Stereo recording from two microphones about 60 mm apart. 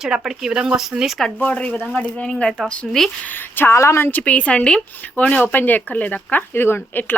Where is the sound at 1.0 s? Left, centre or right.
Centre.